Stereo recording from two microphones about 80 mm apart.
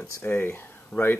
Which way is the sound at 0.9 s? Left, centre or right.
Centre.